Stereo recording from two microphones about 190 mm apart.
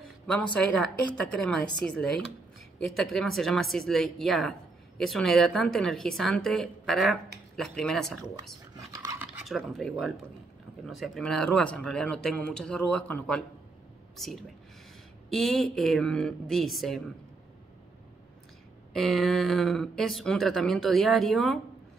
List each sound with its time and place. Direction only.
0.3 s speech: 5° left (ahead or behind)
8.7 s dog: 20° right (ahead or behind)
9.2 s speech: 5° right (ahead or behind)
18.9 s speech: centre (ahead or behind)